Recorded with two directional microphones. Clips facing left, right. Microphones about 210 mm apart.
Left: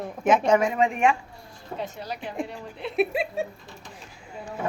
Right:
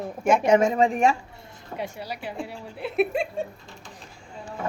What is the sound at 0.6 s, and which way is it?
Speech, 35° right (ahead or behind).